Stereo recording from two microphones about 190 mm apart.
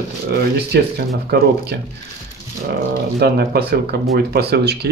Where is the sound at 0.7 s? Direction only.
55° right (ahead or behind).